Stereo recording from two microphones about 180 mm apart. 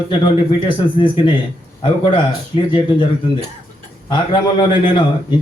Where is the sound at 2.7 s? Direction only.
25° left (ahead or behind).